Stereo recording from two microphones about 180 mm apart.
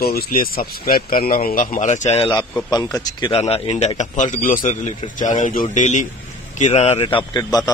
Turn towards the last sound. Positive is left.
turn(degrees=20)  # may be behind; listen again after turning